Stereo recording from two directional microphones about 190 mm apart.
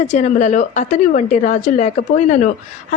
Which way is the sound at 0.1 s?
40° left (ahead or behind).